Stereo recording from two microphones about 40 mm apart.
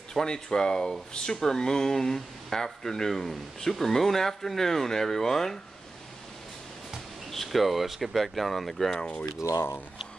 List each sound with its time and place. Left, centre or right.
0.1 s speech: centre
7.2 s speech: centre